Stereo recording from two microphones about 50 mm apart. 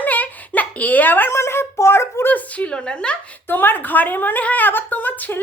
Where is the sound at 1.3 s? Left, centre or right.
Left.